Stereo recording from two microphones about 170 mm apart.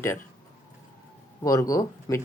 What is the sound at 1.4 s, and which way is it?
Speech, 20° left (ahead or behind).